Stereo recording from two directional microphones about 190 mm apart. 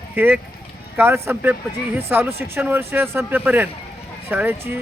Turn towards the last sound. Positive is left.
turn(degrees=-10)  # may be behind; listen again after turning